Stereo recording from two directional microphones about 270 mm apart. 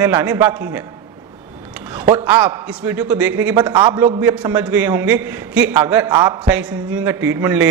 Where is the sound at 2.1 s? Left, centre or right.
Centre.